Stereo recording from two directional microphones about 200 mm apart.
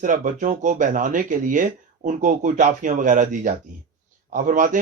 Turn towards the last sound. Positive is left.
turn(degrees=-40)  # may be behind; listen again after turning